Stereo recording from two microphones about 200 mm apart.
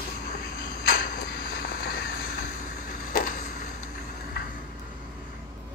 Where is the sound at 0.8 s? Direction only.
45° left (ahead or behind).